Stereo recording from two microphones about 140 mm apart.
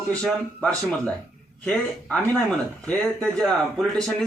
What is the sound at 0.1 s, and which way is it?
A man's voice, 5° left (ahead or behind).